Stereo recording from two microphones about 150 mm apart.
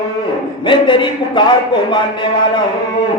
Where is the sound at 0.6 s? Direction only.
35° left (ahead or behind).